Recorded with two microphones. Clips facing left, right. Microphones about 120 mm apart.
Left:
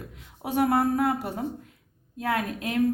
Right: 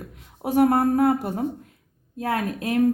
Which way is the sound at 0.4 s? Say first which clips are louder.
Right 4 dB; 40° right (ahead or behind).